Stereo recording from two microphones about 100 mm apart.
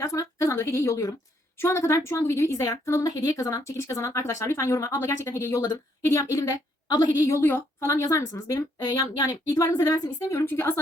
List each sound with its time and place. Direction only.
0.0 s a sound: 30° left (ahead or behind)
1.6 s a woman's voice: 30° left (ahead or behind); by 7.3 s 45° left (ahead or behind)
7.3 s a woman's voice: 25° left (ahead or behind)
10.4 s speech: 20° left (ahead or behind)